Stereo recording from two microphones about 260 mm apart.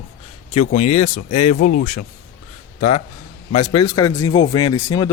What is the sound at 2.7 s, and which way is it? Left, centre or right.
A man's voice, left.